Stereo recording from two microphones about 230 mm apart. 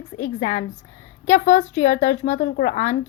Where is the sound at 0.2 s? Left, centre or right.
Left.